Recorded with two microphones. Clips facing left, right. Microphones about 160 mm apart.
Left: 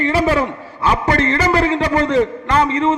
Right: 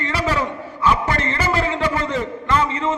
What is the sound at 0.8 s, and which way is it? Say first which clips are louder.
Speech: left 2 dB; 35° left (ahead or behind).